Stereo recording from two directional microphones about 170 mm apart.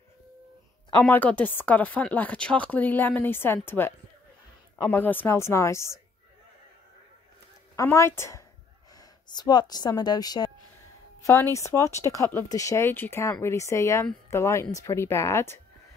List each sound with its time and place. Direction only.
1.0 s speech: 10° left (ahead or behind)
7.7 s speech: 15° left (ahead or behind)
11.5 s speech: 20° left (ahead or behind)